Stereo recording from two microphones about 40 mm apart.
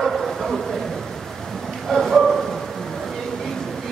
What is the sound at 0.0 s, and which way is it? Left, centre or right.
Bow-wow, centre.